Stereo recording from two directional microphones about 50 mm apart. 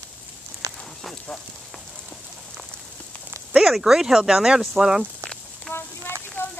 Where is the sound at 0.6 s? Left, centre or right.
Right.